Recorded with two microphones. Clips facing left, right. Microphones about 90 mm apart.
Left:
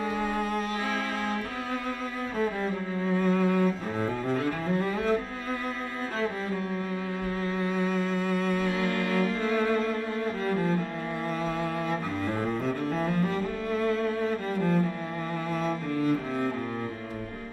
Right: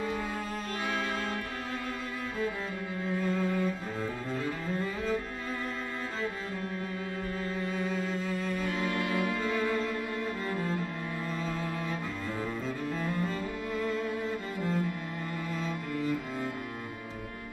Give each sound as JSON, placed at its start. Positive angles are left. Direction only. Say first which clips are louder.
{"t": 0.0, "sound": "music", "louder": "left 5 dB", "side_deg": 60}
{"t": 3.1, "sound": "music", "louder": "left 5 dB", "side_deg": 60}
{"t": 7.7, "sound": "music", "louder": "left 4 dB", "side_deg": 55}
{"t": 9.6, "sound": "cello", "louder": "left 4 dB", "side_deg": 50}
{"t": 11.4, "sound": "music", "louder": "left 5 dB", "side_deg": 60}
{"t": 12.4, "sound": "cello", "louder": "left 5 dB", "side_deg": 60}